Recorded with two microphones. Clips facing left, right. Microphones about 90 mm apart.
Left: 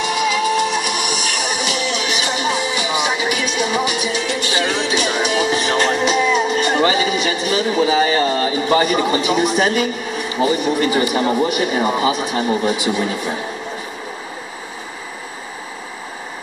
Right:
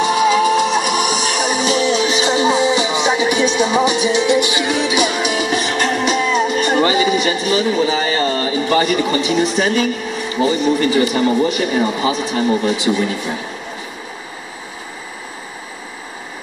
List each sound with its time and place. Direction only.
0.0 s music: 35° right (ahead or behind); by 5.3 s 10° right (ahead or behind)
5.4 s music: 30° left (ahead or behind)
6.0 s music: 5° left (ahead or behind)
10.4 s a man's voice: 25° left (ahead or behind)